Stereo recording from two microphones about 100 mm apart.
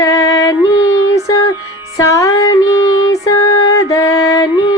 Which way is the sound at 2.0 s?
30° left (ahead or behind).